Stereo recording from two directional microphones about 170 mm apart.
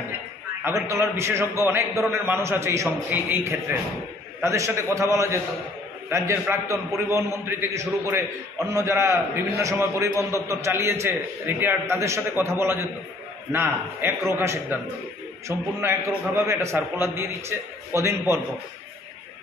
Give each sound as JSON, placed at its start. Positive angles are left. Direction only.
{"t": 0.7, "sound": "a man's voice", "side_deg": -15}
{"t": 4.4, "sound": "a man's voice", "side_deg": -15}